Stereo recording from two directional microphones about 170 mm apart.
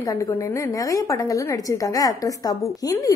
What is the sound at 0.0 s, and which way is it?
A woman's voice, 20° left (ahead or behind).